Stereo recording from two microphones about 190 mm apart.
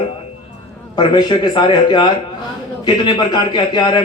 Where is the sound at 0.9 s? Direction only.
20° left (ahead or behind).